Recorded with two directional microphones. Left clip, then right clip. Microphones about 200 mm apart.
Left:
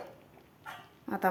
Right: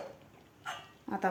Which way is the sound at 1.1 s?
15° left (ahead or behind).